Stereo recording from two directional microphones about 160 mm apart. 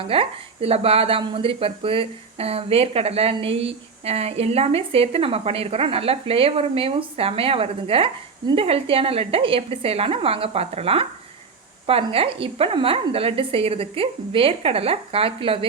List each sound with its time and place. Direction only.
0.1 s speech: 35° right (ahead or behind)